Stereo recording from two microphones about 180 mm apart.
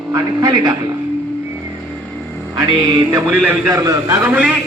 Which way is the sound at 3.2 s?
15° right (ahead or behind).